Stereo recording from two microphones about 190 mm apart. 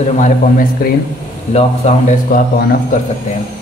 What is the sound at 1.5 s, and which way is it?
Speech, 35° left (ahead or behind).